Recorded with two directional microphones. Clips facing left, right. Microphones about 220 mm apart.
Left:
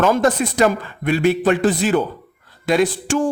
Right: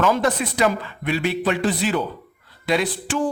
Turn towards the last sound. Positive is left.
turn(degrees=45)  # may be behind; listen again after turning